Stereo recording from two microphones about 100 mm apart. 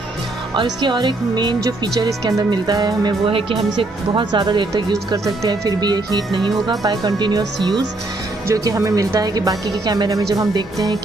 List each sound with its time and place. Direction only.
0.6 s speech: 50° right (ahead or behind)
3.3 s speech: 65° right (ahead or behind); by 4.9 s 50° right (ahead or behind)
5.1 s speech: 35° right (ahead or behind)
8.5 s speech: 30° right (ahead or behind)